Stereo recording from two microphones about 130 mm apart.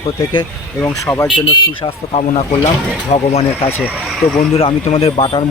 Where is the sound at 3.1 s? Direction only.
55° left (ahead or behind).